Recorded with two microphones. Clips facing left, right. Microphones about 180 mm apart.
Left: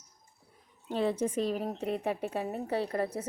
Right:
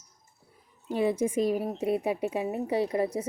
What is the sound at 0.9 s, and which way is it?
A woman's voice, 10° right (ahead or behind).